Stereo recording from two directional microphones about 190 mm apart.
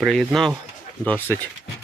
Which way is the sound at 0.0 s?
Centre (ahead or behind).